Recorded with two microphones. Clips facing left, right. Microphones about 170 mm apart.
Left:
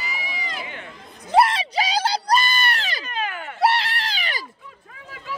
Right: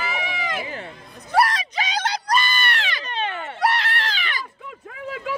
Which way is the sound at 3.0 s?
30° right (ahead or behind).